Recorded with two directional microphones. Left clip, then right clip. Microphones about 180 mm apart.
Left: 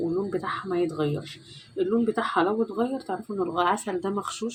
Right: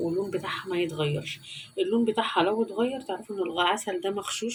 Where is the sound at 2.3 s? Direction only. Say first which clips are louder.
Left 1 dB; 45° left (ahead or behind).